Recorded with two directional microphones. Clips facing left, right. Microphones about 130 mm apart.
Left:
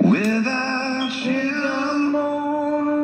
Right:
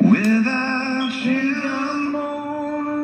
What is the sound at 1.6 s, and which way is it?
Music, 15° left (ahead or behind).